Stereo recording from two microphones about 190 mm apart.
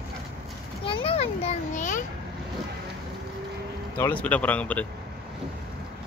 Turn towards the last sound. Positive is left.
turn(degrees=10)  # may be behind; listen again after turning